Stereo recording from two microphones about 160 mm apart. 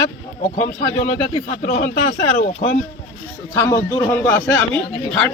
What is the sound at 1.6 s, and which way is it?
Speech, 65° left (ahead or behind).